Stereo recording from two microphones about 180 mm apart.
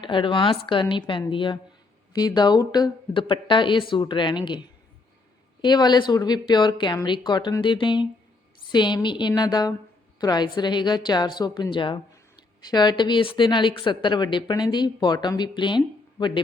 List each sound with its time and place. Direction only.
0.0 s a woman's voice: 25° left (ahead or behind)
5.6 s a woman's voice: 25° left (ahead or behind)